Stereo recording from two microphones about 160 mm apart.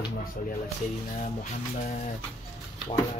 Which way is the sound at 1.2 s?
55° left (ahead or behind).